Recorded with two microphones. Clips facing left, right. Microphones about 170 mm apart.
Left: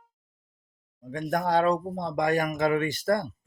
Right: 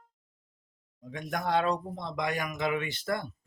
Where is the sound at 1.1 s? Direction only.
45° left (ahead or behind).